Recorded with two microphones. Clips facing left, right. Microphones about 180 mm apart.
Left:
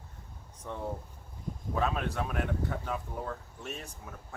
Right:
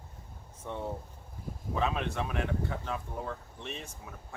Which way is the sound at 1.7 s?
Centre (ahead or behind).